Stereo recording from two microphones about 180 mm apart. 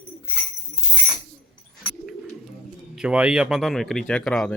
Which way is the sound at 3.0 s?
5° right (ahead or behind).